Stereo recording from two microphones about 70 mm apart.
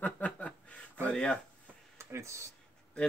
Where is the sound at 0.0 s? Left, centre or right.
Left.